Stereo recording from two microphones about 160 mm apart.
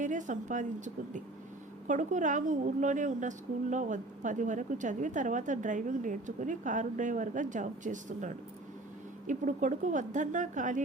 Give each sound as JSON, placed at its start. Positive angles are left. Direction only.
{"t": 0.0, "sound": "a woman's voice", "side_deg": -50}
{"t": 1.9, "sound": "a woman's voice", "side_deg": -50}